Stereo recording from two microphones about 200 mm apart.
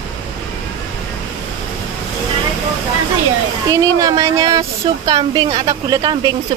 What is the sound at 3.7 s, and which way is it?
A woman's voice, 15° right (ahead or behind).